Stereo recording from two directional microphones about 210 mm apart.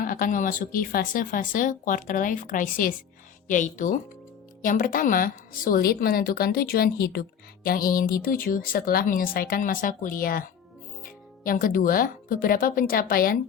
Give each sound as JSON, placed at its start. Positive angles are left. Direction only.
{"t": 0.0, "sound": "a woman's voice", "side_deg": 40}